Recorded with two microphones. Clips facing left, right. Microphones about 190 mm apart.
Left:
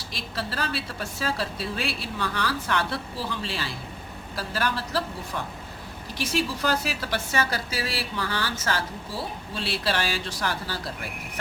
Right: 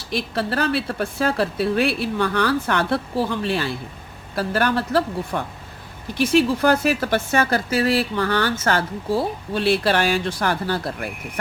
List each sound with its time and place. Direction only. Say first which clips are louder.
0.1 s a woman's voice: right 10 dB; 60° right (ahead or behind)